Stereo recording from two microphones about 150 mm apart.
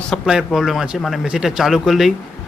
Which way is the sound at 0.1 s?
5° right (ahead or behind).